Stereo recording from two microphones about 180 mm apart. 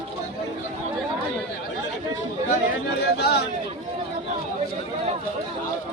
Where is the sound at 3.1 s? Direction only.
65° left (ahead or behind).